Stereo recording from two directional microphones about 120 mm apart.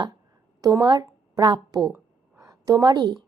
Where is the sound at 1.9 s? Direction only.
25° right (ahead or behind).